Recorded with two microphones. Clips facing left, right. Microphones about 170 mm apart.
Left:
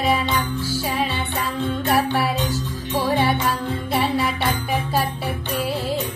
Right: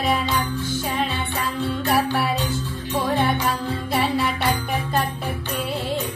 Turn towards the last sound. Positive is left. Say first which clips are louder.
# left 2 dB
turn(degrees=0)  # may be behind; listen again after turning